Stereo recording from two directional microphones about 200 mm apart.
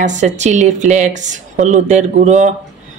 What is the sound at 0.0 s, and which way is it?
Speech, 35° right (ahead or behind).